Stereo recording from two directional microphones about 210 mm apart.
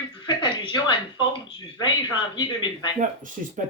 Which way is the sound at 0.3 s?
20° left (ahead or behind).